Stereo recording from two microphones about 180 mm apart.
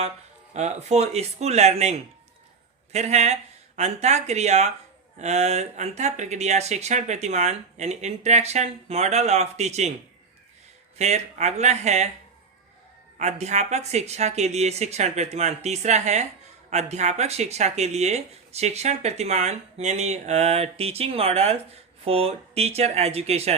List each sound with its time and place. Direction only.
0.5 s speech: 40° right (ahead or behind)
10.9 s speech: 40° right (ahead or behind)
13.1 s speech: 40° right (ahead or behind)